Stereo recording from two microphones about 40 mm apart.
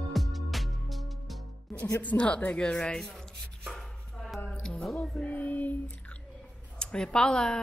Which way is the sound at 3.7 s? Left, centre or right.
Centre.